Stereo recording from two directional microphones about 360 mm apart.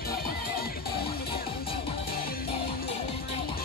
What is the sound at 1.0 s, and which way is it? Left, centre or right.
Music, centre.